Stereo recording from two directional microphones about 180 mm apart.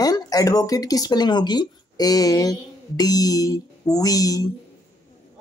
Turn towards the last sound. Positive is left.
turn(degrees=20)  # may be behind; listen again after turning